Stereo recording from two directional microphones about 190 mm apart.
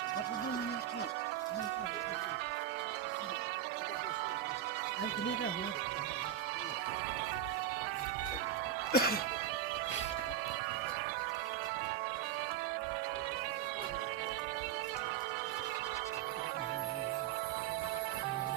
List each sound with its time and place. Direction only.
8.9 s speech: 55° left (ahead or behind)